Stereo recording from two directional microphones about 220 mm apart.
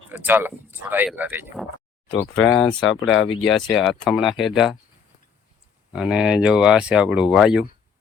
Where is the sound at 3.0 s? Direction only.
60° left (ahead or behind).